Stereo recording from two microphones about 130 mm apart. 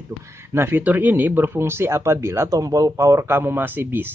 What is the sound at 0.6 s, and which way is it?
Speech, 15° right (ahead or behind).